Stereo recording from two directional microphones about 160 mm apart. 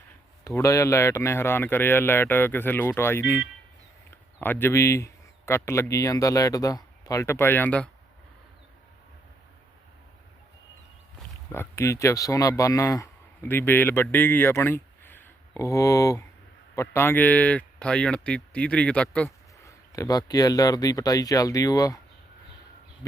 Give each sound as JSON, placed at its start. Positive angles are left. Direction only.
{"t": 0.4, "sound": "speech", "side_deg": 20}
{"t": 4.4, "sound": "speech", "side_deg": 15}
{"t": 11.5, "sound": "speech", "side_deg": 15}
{"t": 19.6, "sound": "speech", "side_deg": 20}